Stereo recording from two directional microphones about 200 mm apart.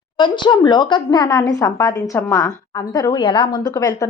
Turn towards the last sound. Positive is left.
turn(degrees=20)  # may be behind; listen again after turning